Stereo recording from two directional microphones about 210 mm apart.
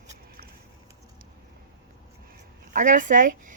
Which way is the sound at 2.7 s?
40° right (ahead or behind).